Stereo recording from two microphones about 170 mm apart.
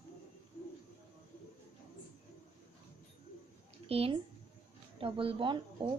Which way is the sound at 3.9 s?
35° right (ahead or behind).